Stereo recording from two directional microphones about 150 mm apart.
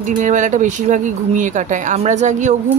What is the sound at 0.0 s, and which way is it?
Speech, 55° right (ahead or behind).